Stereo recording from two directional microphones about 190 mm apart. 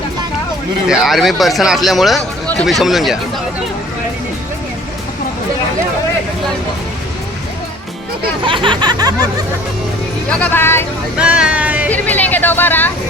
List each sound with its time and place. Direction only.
0.9 s speech: centre (ahead or behind)
8.4 s a sound: 25° right (ahead or behind)
10.2 s speech: 5° left (ahead or behind)
11.2 s speech: 5° right (ahead or behind)
11.9 s speech: 10° left (ahead or behind)